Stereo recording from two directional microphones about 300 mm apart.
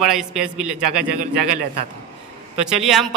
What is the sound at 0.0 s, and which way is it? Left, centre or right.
A man's voice, centre.